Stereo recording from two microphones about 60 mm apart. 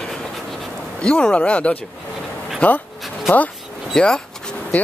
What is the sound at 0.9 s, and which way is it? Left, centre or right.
Speech, centre.